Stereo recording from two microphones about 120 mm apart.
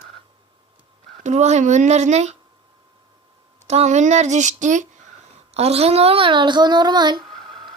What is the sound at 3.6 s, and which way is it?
Speech, 65° right (ahead or behind).